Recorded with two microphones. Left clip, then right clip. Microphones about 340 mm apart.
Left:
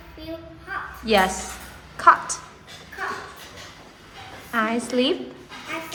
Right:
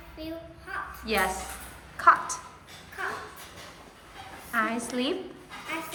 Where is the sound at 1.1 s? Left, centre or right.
Centre.